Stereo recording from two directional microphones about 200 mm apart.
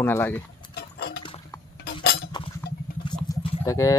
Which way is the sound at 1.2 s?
25° left (ahead or behind).